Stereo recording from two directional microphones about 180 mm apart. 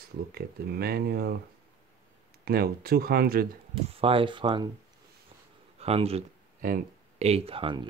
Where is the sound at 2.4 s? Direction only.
55° right (ahead or behind).